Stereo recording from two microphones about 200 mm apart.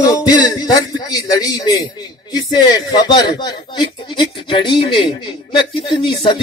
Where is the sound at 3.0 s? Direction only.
20° left (ahead or behind).